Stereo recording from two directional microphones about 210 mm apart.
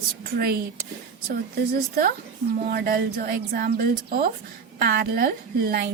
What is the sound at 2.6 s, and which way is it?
A woman's voice, 45° right (ahead or behind).